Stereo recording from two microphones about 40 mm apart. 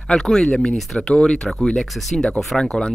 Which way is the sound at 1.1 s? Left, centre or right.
Left.